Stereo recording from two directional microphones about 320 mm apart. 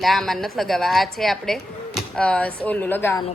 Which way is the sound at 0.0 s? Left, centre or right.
Centre.